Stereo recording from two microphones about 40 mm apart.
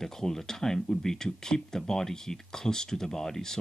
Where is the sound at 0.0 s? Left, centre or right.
Centre.